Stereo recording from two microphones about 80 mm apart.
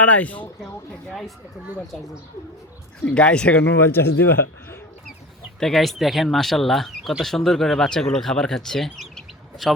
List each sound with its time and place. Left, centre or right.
0.0 s speech: centre
3.0 s speech: centre
3.8 s a man's voice: left
5.5 s speech: centre